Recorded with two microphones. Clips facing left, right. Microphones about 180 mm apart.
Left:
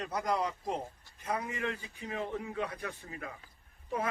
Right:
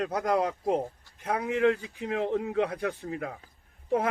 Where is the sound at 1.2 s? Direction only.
70° right (ahead or behind).